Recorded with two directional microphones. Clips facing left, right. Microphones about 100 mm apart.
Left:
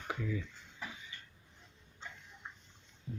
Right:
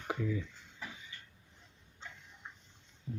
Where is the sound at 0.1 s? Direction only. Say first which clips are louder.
Right 3 dB; 20° right (ahead or behind).